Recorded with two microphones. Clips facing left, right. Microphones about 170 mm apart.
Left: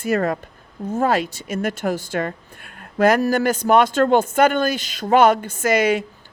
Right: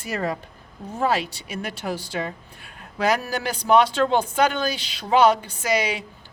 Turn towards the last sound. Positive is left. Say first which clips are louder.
# left 6 dB
turn(degrees=50)  # may be behind; listen again after turning